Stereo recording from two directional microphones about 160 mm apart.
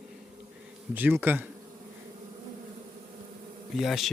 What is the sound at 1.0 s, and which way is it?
Speech, 10° right (ahead or behind).